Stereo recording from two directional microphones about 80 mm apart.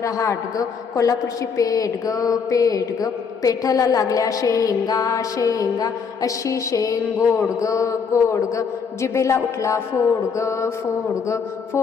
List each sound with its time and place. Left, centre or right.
0.0 s a woman's voice: left